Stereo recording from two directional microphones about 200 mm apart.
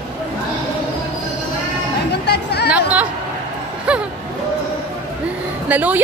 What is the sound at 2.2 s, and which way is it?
Chatter, 55° left (ahead or behind).